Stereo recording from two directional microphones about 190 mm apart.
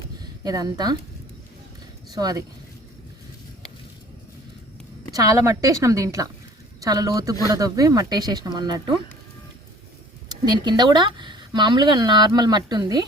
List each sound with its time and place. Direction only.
0.4 s speech: 20° right (ahead or behind)
2.1 s speech: 20° right (ahead or behind)
5.1 s a woman's voice: 20° right (ahead or behind)
10.2 s speech: 20° right (ahead or behind)